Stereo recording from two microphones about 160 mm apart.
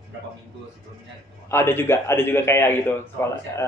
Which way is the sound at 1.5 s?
15° left (ahead or behind).